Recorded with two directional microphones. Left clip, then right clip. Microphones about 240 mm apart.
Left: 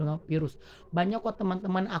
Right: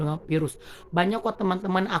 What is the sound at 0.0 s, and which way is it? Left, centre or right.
Speech, centre.